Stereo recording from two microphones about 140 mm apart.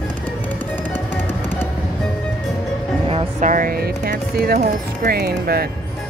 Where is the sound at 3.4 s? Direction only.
70° right (ahead or behind); by 5.6 s 90° right.